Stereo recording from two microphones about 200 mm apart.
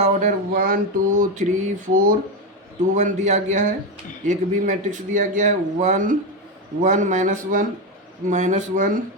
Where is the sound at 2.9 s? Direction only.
35° right (ahead or behind).